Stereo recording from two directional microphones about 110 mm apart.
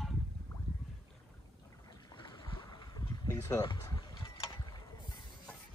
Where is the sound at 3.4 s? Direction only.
30° left (ahead or behind).